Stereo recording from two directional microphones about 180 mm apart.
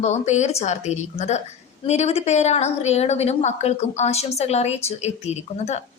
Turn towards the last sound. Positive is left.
turn(degrees=40)  # may be behind; listen again after turning